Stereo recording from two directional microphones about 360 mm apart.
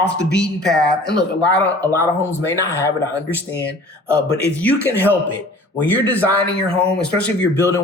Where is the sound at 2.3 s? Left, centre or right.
Centre.